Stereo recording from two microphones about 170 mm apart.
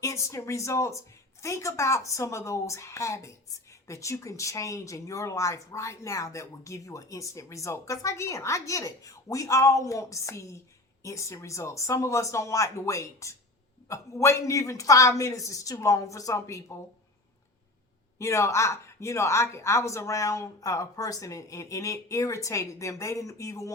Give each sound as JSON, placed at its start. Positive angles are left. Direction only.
{"t": 0.0, "sound": "speech", "side_deg": 15}
{"t": 18.2, "sound": "speech", "side_deg": 15}